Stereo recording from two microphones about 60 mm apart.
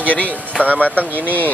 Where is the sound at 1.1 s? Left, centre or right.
Right.